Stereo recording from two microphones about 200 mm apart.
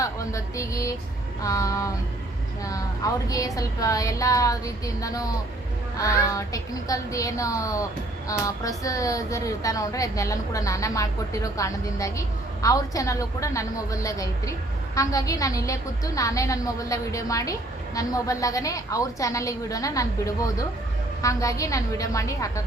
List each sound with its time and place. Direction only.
0.0 s music: 15° left (ahead or behind)
1.4 s a woman's voice: 15° left (ahead or behind)